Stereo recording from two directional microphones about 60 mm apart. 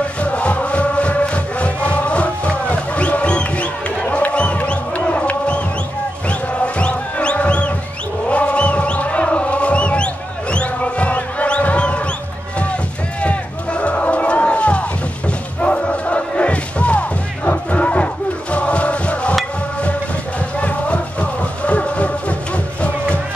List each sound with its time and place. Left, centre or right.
0.2 s music: left
4.0 s a sound: left
6.2 s music: left
8.3 s a sound: left
13.2 s run: left
17.5 s chant: left
20.6 s music: left